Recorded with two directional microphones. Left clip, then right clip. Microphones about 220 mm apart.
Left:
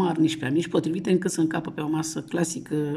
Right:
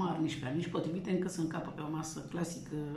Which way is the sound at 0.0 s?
45° left (ahead or behind).